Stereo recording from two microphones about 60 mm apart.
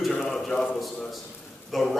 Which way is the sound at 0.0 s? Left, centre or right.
Centre.